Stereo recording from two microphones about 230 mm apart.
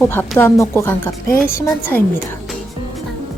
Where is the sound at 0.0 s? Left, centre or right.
Centre.